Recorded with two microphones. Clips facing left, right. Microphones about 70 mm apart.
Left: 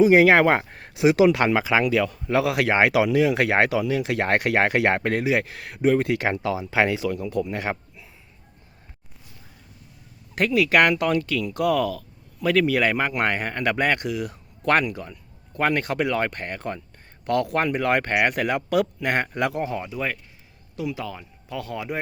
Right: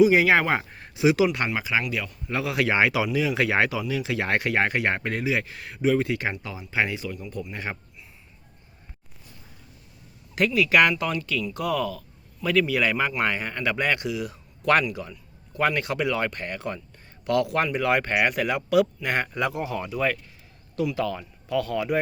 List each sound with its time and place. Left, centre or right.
0.0 s a man's voice: left
0.7 s a sound: left
1.3 s speech: left
2.2 s speech: left
5.9 s a man's voice: left
6.1 s speech: left
10.3 s a man's voice: left
19.7 s speech: centre